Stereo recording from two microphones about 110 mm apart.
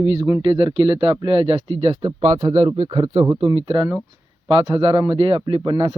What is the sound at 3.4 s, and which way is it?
A man's voice, 50° right (ahead or behind).